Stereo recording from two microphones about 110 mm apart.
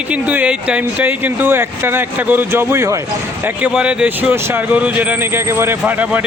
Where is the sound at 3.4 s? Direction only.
10° right (ahead or behind).